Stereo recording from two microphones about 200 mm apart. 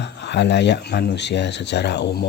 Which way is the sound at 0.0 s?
60° left (ahead or behind).